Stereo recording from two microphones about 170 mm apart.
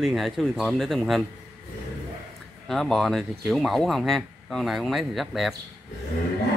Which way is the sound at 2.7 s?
Centre (ahead or behind).